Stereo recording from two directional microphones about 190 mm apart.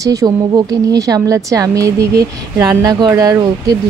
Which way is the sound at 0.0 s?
20° right (ahead or behind).